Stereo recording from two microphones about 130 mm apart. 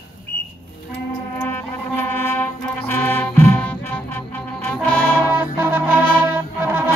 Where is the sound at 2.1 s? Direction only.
15° left (ahead or behind).